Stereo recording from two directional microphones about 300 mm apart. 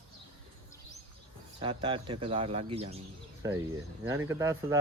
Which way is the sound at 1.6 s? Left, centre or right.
Centre.